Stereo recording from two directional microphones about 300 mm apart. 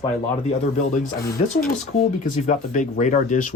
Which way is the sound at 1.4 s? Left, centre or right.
Left.